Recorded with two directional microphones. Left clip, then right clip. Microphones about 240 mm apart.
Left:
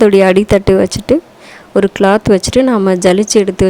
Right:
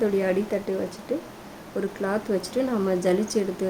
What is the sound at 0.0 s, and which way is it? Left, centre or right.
A woman's voice, left.